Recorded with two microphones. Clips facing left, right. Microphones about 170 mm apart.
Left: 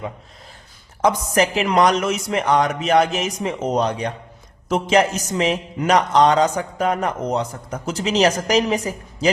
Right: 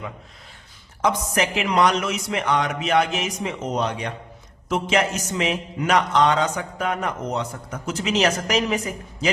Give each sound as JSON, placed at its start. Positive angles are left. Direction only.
{"t": 1.0, "sound": "a man's voice", "side_deg": 40}